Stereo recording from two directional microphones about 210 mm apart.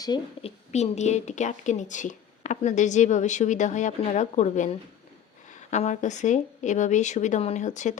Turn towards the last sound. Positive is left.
turn(degrees=35)  # may be behind; listen again after turning